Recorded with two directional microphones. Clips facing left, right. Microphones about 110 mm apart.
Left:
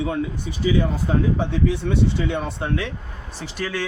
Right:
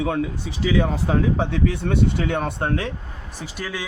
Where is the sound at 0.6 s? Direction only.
90° right; by 2.9 s 45° right (ahead or behind).